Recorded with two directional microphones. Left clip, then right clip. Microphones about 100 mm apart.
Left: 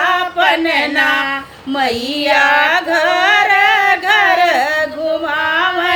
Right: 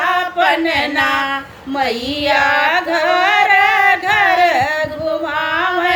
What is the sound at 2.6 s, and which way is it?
Singing, 35° left (ahead or behind).